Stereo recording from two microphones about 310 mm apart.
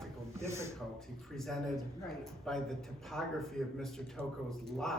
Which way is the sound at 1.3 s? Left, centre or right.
Centre.